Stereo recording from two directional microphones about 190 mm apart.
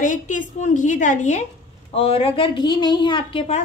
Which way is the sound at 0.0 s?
40° left (ahead or behind).